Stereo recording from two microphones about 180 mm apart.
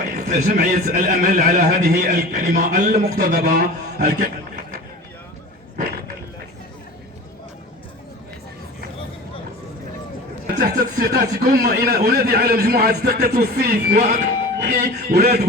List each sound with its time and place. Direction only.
0.3 s a man's voice: 55° right (ahead or behind)
10.4 s speech: 50° right (ahead or behind)